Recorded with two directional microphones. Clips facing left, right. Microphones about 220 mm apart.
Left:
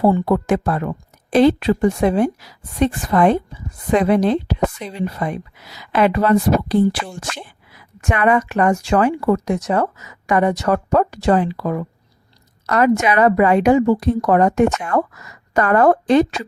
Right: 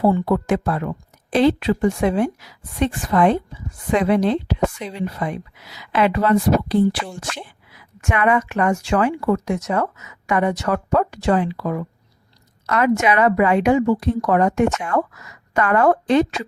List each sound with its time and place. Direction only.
0.0 s speech: 40° left (ahead or behind)
8.0 s speech: 35° left (ahead or behind)